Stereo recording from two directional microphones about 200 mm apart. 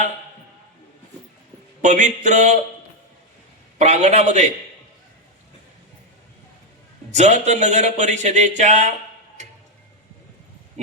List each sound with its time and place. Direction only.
1.8 s speech: 35° right (ahead or behind)
3.8 s speech: 35° right (ahead or behind)
7.1 s speech: 35° right (ahead or behind)